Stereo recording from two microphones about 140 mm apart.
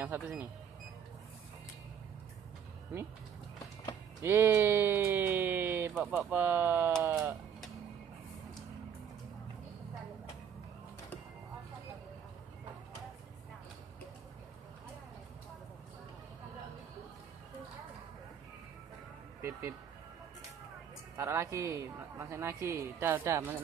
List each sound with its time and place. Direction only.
0.0 s speech: 15° right (ahead or behind)
4.2 s a sound: 20° right (ahead or behind)
7.0 s speech: 10° right (ahead or behind)
21.2 s a woman's voice: 20° right (ahead or behind)